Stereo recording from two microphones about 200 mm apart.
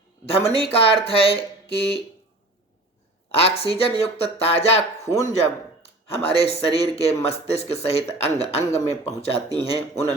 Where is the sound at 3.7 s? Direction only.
30° left (ahead or behind).